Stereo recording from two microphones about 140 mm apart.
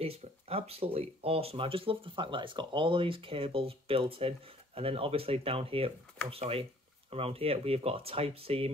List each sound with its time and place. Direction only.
0.0 s speech: 45° right (ahead or behind)